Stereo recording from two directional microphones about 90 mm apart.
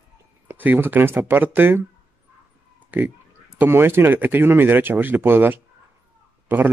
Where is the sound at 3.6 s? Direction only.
25° right (ahead or behind).